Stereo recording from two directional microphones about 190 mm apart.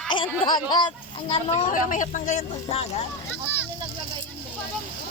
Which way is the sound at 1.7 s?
40° left (ahead or behind).